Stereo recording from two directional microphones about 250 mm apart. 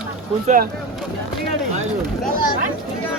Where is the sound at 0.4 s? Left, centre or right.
Right.